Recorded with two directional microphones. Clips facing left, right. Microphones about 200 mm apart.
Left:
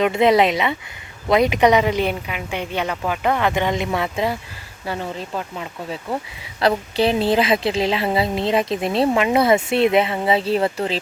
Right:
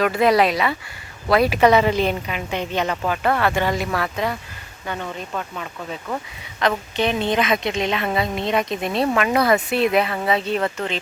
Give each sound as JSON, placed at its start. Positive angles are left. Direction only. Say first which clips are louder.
{"t": 0.0, "sound": "a woman's voice", "louder": "left 1 dB", "side_deg": 25}